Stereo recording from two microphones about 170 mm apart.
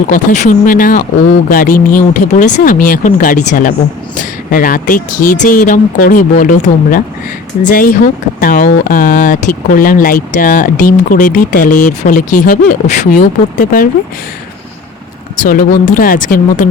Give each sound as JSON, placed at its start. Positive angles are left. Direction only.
{"t": 0.1, "sound": "speech", "side_deg": 55}
{"t": 15.4, "sound": "speech", "side_deg": 55}